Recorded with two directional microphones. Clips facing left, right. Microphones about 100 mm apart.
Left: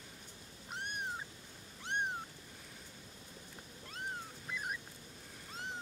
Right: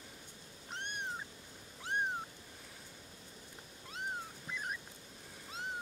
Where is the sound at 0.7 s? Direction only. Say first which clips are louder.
Even; 5° left (ahead or behind).